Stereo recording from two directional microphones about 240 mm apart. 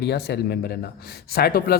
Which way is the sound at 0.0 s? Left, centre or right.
Left.